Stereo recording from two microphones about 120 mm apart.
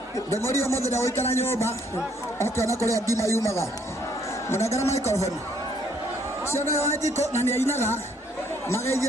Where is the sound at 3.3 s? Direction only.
25° left (ahead or behind).